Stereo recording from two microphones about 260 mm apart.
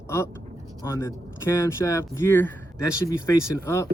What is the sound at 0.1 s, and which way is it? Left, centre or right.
Speech, centre.